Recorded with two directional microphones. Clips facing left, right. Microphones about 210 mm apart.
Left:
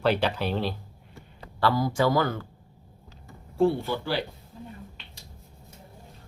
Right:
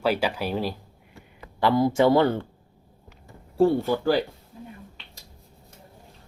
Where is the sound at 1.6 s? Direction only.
25° right (ahead or behind).